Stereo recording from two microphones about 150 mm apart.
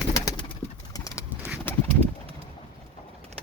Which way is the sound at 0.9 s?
20° left (ahead or behind).